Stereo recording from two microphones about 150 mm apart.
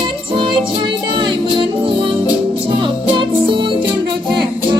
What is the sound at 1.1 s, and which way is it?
Music, 30° right (ahead or behind).